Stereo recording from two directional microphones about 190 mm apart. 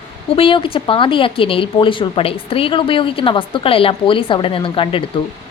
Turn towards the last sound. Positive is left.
turn(degrees=25)  # may be behind; listen again after turning